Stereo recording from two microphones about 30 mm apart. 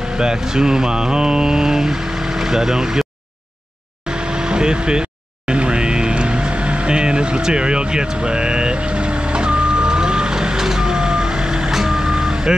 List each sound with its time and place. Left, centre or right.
0.2 s a sound: right
4.1 s vehicle: right
5.5 s music: right
7.4 s vehicle: right
11.8 s reversing beeps: centre